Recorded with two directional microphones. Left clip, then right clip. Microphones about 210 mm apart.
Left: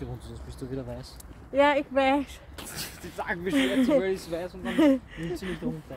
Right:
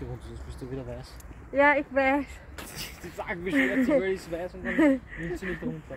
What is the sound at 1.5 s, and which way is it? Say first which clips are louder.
Speech: even; 10° left (ahead or behind).